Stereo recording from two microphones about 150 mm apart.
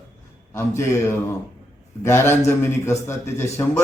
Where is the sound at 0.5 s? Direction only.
20° left (ahead or behind).